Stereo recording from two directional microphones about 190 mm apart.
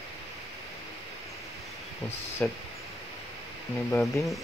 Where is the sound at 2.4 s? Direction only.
10° left (ahead or behind).